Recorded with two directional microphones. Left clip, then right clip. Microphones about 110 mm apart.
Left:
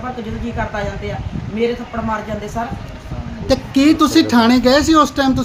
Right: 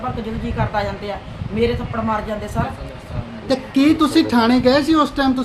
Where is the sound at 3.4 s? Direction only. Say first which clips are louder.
Left 3 dB; 35° left (ahead or behind).